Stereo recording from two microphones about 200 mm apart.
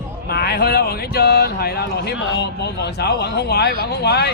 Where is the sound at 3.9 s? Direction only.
55° left (ahead or behind).